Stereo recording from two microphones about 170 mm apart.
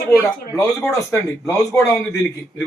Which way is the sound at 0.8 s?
10° left (ahead or behind).